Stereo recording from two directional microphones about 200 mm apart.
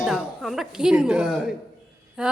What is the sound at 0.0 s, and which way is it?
Speech, centre (ahead or behind).